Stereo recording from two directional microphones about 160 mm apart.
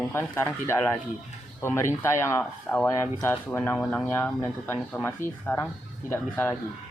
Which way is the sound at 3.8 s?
5° left (ahead or behind).